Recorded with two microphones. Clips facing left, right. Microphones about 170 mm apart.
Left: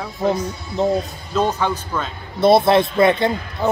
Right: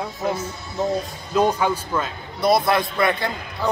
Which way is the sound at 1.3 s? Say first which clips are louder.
Right 1 dB; 10° right (ahead or behind).